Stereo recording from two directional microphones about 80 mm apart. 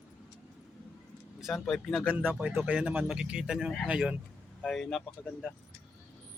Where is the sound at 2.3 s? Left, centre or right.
Centre.